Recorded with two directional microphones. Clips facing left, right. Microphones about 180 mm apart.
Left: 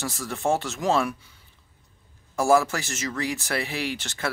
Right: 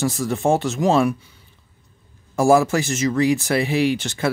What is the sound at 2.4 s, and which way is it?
Speech, 15° right (ahead or behind).